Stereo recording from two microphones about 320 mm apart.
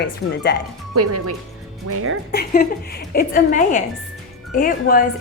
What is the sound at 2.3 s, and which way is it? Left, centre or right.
A woman's voice, left.